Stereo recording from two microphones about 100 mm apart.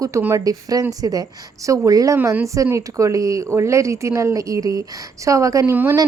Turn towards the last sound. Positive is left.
turn(degrees=-30)  # may be behind; listen again after turning